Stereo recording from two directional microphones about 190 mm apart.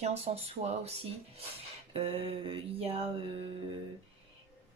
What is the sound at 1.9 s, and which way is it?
Speech, 30° right (ahead or behind).